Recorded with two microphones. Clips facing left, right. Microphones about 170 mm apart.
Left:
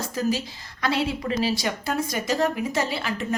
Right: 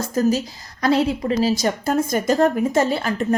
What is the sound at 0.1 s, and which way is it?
Speech, 45° right (ahead or behind).